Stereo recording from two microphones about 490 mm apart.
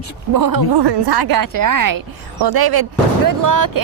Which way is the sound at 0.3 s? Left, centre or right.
Right.